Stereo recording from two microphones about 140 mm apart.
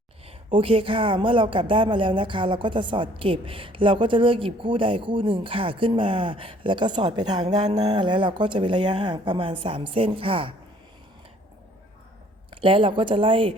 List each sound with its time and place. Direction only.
0.5 s a woman's voice: 40° right (ahead or behind)
12.5 s a woman's voice: 40° right (ahead or behind)